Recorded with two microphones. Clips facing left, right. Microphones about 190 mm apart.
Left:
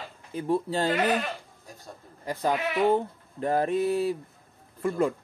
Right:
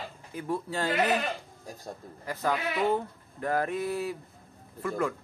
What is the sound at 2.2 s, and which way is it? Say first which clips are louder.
Speech: left 3 dB; 20° left (ahead or behind).